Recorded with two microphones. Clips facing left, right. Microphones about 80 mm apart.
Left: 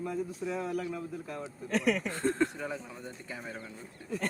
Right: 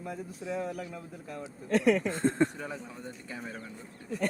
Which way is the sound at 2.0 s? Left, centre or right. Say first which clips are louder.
Right 2 dB; right.